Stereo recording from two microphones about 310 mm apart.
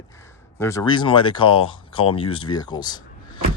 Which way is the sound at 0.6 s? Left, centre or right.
Centre.